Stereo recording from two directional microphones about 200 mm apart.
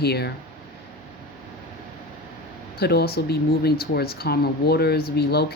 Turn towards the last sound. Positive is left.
turn(degrees=55)  # may be behind; listen again after turning